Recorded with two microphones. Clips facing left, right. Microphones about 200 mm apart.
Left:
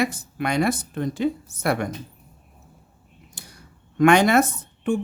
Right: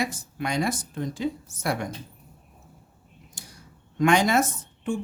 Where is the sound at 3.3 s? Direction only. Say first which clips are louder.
Left 1 dB; 60° left (ahead or behind).